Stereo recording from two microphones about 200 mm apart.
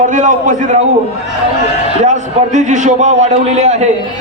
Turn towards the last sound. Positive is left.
turn(degrees=-35)  # may be behind; listen again after turning